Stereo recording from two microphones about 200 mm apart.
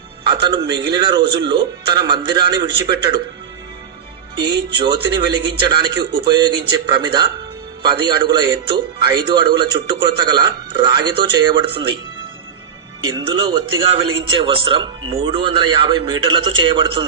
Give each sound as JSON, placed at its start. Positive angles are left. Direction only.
{"t": 0.3, "sound": "a man's voice", "side_deg": -20}
{"t": 4.4, "sound": "a man's voice", "side_deg": -20}
{"t": 13.1, "sound": "a man's voice", "side_deg": -20}